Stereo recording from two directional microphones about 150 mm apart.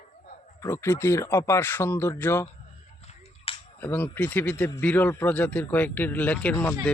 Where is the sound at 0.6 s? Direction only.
20° left (ahead or behind).